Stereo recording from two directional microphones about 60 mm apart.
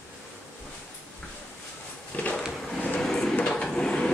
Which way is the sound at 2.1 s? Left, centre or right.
Left.